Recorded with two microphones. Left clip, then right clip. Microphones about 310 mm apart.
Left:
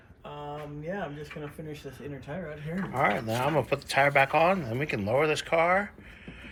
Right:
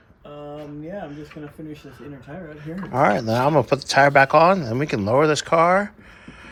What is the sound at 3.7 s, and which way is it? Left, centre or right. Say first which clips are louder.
Speech: right 8 dB; centre.